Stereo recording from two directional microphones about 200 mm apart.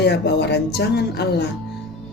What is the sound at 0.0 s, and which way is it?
Speech, 55° left (ahead or behind).